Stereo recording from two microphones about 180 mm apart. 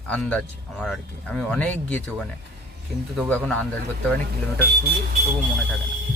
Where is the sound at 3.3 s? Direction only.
5° left (ahead or behind).